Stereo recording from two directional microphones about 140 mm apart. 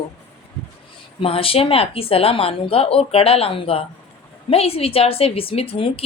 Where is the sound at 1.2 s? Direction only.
40° left (ahead or behind).